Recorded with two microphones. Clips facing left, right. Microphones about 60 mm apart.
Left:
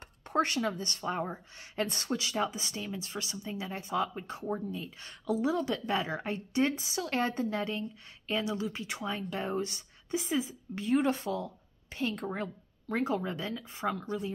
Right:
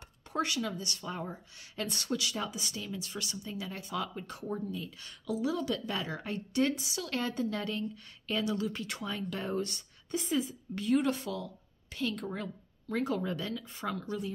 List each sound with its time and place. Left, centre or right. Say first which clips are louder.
0.3 s speech: left 4 dB; left